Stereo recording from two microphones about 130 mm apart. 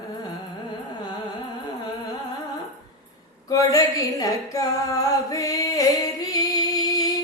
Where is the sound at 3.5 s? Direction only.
25° left (ahead or behind).